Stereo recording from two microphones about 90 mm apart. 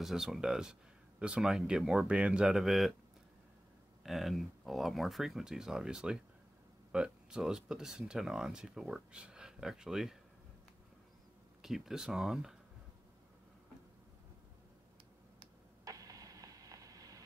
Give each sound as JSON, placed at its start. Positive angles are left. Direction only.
{"t": 0.0, "sound": "speech", "side_deg": -5}
{"t": 4.0, "sound": "speech", "side_deg": 0}
{"t": 11.6, "sound": "speech", "side_deg": -5}
{"t": 15.8, "sound": "a sound", "side_deg": -40}